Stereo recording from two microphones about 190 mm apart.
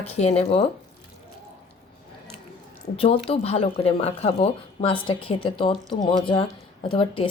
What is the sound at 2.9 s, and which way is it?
Speech, 30° left (ahead or behind).